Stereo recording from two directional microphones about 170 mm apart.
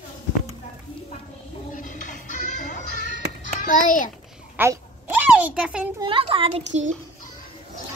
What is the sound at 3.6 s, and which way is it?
Speech, 50° left (ahead or behind).